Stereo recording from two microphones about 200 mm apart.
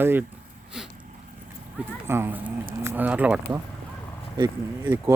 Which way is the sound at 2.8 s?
10° right (ahead or behind).